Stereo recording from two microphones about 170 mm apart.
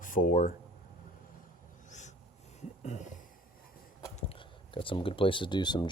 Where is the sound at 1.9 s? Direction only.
45° left (ahead or behind).